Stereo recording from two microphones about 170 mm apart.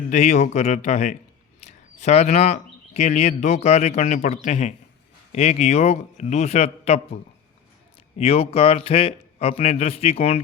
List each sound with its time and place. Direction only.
0.1 s a man's voice: 40° left (ahead or behind)
8.2 s a man's voice: 35° left (ahead or behind)